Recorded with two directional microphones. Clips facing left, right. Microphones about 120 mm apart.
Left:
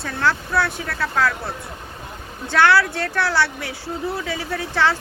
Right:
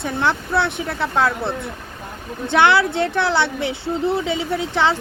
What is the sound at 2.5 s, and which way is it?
Speech, 20° right (ahead or behind).